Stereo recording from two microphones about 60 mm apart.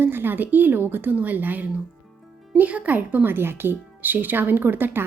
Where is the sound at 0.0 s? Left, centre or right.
Right.